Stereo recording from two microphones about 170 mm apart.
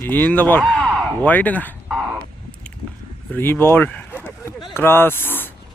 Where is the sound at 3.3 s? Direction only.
15° left (ahead or behind).